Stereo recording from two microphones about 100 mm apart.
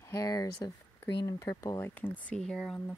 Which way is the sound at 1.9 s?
20° left (ahead or behind).